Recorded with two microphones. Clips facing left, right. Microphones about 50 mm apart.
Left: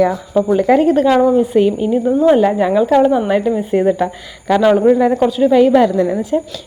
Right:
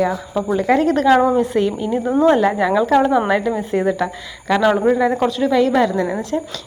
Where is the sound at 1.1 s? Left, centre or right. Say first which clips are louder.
Left 2 dB; right.